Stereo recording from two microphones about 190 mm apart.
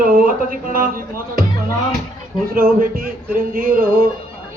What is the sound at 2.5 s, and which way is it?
A man's voice, 50° right (ahead or behind).